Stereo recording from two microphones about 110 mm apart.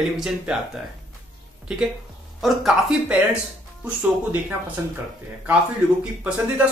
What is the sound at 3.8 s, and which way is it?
Speech, 15° right (ahead or behind).